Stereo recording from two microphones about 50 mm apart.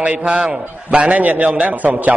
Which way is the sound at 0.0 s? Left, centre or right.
Right.